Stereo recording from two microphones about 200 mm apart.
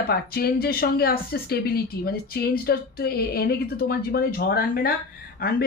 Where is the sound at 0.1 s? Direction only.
50° left (ahead or behind).